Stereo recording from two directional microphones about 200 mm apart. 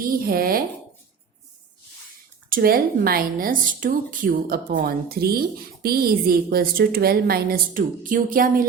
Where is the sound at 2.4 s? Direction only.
45° right (ahead or behind).